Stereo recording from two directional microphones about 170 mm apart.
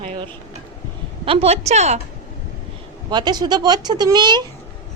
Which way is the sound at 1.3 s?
35° right (ahead or behind).